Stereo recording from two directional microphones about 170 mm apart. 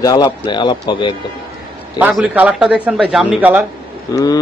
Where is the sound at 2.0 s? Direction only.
10° right (ahead or behind).